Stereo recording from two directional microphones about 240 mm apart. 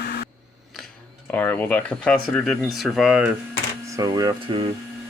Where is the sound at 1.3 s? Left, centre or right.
Centre.